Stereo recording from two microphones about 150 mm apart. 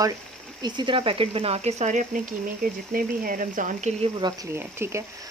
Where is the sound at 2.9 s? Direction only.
70° right (ahead or behind).